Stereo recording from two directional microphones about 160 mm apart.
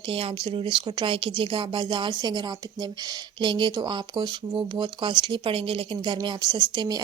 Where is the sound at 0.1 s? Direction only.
35° right (ahead or behind).